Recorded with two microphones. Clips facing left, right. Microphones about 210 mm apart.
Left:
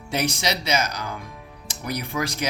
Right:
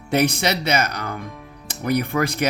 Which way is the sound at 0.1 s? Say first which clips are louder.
Right 6 dB; 60° right (ahead or behind).